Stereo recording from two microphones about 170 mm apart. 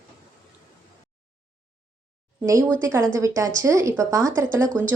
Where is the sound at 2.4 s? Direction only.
10° right (ahead or behind).